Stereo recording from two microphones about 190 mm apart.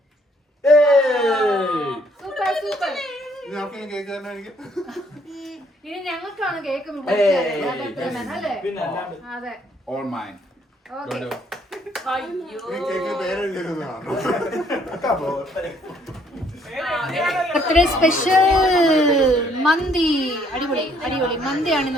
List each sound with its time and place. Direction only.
0.6 s speech: centre (ahead or behind)
18.1 s speech: 45° left (ahead or behind)
18.4 s speech: centre (ahead or behind)